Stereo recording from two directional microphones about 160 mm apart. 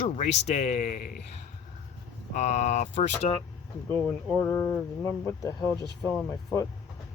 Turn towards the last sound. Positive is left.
turn(degrees=20)  # may be behind; listen again after turning